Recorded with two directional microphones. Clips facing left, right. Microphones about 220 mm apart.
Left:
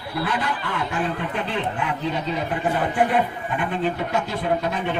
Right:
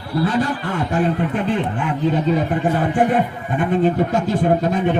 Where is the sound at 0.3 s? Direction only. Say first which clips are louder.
Right 6 dB; 45° right (ahead or behind).